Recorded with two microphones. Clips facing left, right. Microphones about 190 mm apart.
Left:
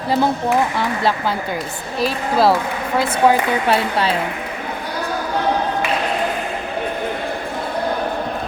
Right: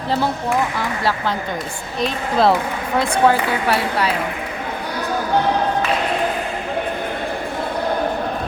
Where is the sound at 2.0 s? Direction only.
5° left (ahead or behind).